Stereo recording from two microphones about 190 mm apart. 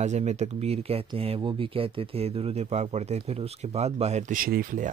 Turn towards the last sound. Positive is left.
turn(degrees=-45)  # may be behind; listen again after turning